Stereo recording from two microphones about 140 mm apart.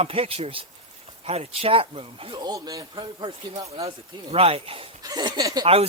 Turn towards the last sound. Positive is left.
turn(degrees=-25)  # may be behind; listen again after turning